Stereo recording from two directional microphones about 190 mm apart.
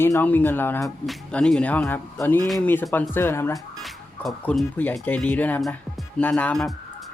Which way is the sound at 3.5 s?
Centre (ahead or behind).